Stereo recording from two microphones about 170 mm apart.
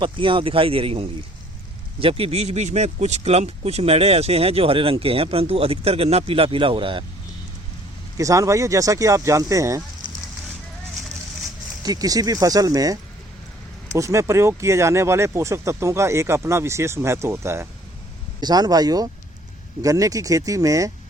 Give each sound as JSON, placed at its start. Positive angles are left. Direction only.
{"t": 0.0, "sound": "speech", "side_deg": -30}
{"t": 8.2, "sound": "speech", "side_deg": -20}
{"t": 11.8, "sound": "speech", "side_deg": -20}